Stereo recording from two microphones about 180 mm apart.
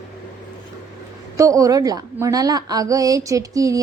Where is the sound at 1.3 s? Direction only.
20° right (ahead or behind).